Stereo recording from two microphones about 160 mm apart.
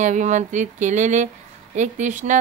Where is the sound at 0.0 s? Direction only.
50° right (ahead or behind).